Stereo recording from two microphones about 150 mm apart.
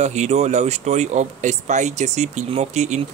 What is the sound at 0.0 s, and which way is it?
Speech, 50° right (ahead or behind).